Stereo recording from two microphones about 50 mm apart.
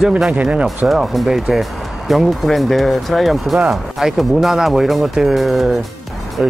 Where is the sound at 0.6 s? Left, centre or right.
Centre.